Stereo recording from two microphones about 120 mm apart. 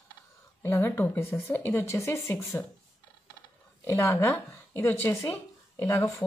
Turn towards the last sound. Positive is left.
turn(degrees=20)  # may be behind; listen again after turning